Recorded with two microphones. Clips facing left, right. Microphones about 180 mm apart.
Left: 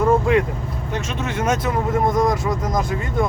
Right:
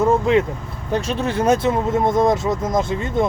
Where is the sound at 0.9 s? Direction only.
35° right (ahead or behind).